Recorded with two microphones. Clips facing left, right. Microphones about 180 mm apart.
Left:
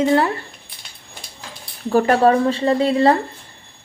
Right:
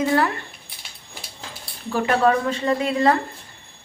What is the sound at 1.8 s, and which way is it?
Speech, 40° left (ahead or behind).